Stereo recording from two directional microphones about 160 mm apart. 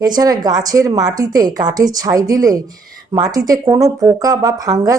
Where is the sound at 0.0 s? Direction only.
25° right (ahead or behind).